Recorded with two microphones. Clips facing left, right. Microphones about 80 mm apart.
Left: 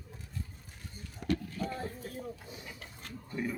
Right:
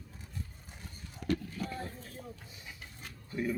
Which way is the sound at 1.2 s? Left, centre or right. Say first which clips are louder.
Even; left.